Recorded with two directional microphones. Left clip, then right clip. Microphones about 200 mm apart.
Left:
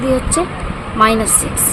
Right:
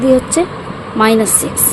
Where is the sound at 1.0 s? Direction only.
25° right (ahead or behind).